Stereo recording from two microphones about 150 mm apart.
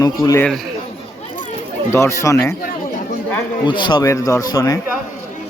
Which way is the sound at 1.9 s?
20° left (ahead or behind).